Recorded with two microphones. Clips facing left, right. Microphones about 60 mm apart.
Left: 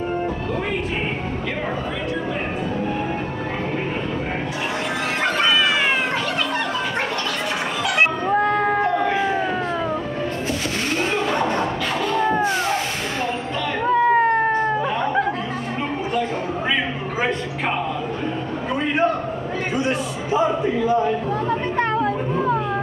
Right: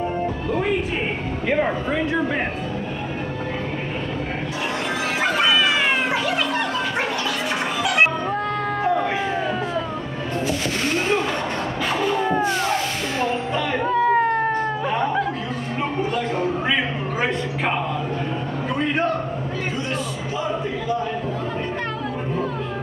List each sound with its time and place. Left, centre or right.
8.3 s music: centre
8.9 s a sound: centre
12.0 s music: centre
13.8 s cat: centre
18.8 s a sound: centre
22.3 s music: left